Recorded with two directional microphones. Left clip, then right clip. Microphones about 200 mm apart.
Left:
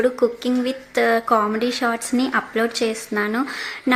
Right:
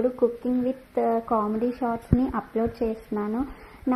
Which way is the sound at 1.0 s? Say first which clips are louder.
Left 7 dB; 25° left (ahead or behind).